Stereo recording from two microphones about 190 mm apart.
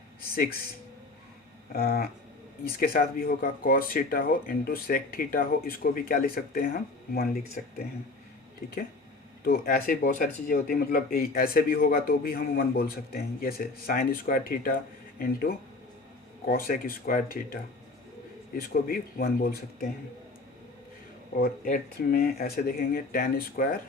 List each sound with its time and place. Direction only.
1.7 s a sound: 55° left (ahead or behind)
2.6 s speech: 50° left (ahead or behind)
9.4 s speech: 50° left (ahead or behind)
21.3 s speech: 50° left (ahead or behind)